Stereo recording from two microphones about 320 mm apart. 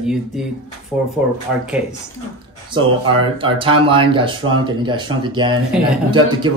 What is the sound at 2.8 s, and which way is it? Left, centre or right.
Speech, centre.